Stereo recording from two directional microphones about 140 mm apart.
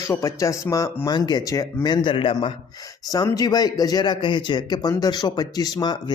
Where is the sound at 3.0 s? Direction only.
25° left (ahead or behind).